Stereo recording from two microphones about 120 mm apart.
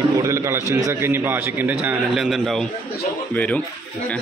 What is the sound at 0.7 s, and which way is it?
A man's voice, 20° right (ahead or behind).